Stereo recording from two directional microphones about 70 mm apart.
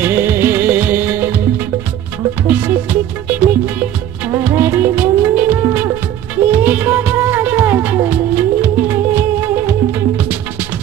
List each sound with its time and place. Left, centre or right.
0.0 s music: right
2.4 s music: right